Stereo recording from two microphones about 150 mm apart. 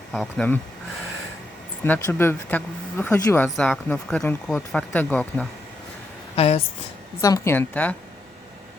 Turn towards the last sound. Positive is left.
turn(degrees=10)  # may be behind; listen again after turning